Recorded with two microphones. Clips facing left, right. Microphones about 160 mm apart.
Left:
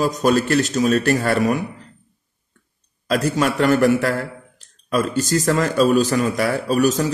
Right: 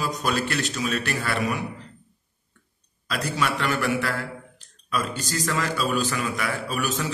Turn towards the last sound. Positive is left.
turn(degrees=40)  # may be behind; listen again after turning